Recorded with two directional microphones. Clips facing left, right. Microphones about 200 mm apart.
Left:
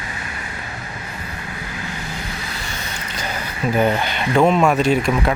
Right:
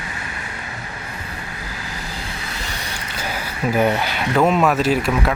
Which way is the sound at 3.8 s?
5° right (ahead or behind).